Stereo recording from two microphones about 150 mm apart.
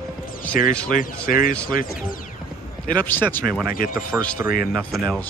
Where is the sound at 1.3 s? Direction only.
70° left (ahead or behind).